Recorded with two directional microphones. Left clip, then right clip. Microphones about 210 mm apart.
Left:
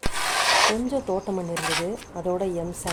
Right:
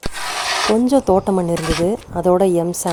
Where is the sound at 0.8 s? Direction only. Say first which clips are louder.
Right 12 dB; 45° right (ahead or behind).